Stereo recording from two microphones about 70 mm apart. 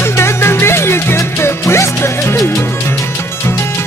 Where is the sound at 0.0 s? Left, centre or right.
Left.